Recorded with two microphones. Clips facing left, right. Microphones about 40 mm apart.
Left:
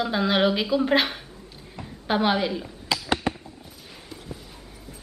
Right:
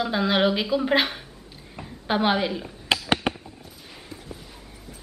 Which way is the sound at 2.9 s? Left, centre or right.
Right.